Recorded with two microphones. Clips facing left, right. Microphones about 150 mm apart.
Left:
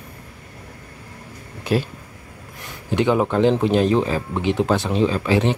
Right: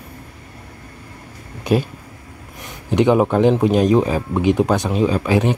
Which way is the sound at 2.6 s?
15° right (ahead or behind).